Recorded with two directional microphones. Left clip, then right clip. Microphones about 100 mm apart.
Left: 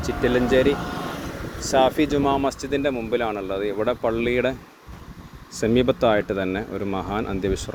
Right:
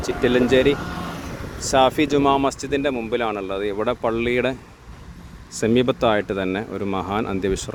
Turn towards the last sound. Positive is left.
turn(degrees=-35)  # may be behind; listen again after turning